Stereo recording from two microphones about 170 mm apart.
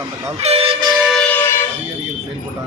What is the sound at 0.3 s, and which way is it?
Vehicle, 35° right (ahead or behind).